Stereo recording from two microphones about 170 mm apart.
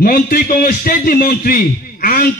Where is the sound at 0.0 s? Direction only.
60° left (ahead or behind).